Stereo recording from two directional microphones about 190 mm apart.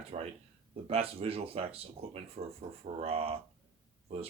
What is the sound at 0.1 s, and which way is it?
Speech, 35° right (ahead or behind).